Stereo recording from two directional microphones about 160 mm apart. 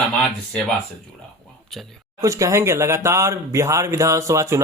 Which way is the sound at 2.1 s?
20° right (ahead or behind).